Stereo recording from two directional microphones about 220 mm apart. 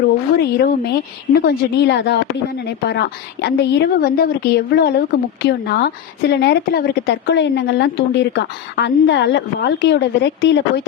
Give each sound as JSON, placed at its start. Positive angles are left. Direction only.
{"t": 0.3, "sound": "a woman's voice", "side_deg": 45}